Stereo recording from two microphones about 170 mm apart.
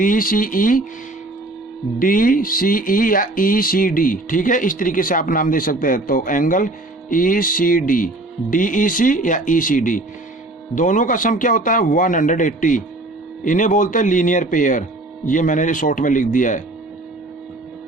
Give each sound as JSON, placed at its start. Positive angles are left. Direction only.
{"t": 0.0, "sound": "speech", "side_deg": 55}
{"t": 2.0, "sound": "music", "side_deg": 55}
{"t": 7.1, "sound": "speech", "side_deg": 55}